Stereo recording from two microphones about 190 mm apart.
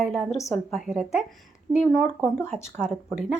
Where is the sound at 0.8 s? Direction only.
Centre (ahead or behind).